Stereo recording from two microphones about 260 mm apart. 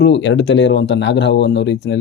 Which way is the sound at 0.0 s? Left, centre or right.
Left.